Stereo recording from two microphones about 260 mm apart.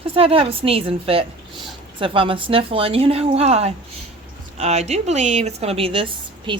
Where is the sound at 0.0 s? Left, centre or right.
Right.